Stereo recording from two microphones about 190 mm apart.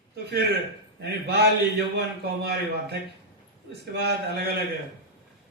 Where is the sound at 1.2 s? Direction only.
65° right (ahead or behind).